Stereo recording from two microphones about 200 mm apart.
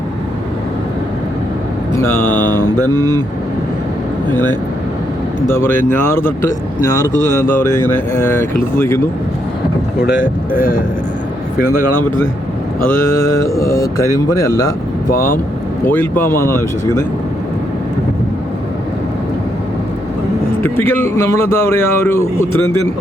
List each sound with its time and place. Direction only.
2.0 s speech: 10° left (ahead or behind)
2.9 s speech: 20° right (ahead or behind)
5.5 s speech: 10° left (ahead or behind)
10.0 s speech: 45° left (ahead or behind)
13.4 s speech: 15° left (ahead or behind)
15.9 s speech: 10° left (ahead or behind)
20.6 s speech: 10° left (ahead or behind)